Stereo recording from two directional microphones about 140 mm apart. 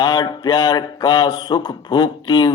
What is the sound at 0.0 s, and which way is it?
Speech, 30° left (ahead or behind).